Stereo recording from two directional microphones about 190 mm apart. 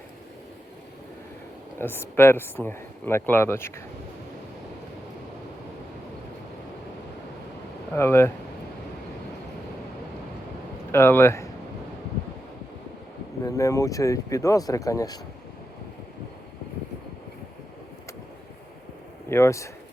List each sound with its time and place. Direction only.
1.8 s speech: 10° left (ahead or behind)
7.9 s speech: 15° left (ahead or behind)
10.9 s speech: 15° left (ahead or behind)
13.4 s speech: 15° left (ahead or behind)
19.3 s speech: 15° left (ahead or behind)